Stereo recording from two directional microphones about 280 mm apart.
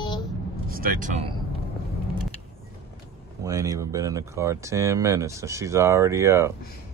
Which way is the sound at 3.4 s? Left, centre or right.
Centre.